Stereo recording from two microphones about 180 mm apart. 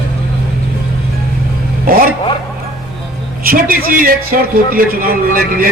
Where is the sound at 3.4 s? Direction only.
55° right (ahead or behind).